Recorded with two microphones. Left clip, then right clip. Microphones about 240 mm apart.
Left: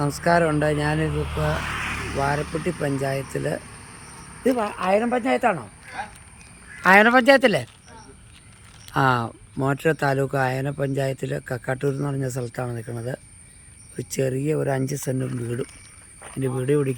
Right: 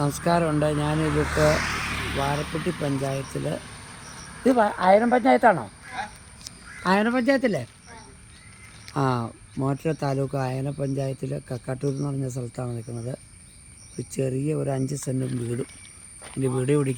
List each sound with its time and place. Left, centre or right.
0.3 s speech: centre
1.0 s speech: left
1.6 s a sound: centre
2.1 s speech: centre
4.4 s speech: centre
6.8 s speech: centre
8.9 s speech: centre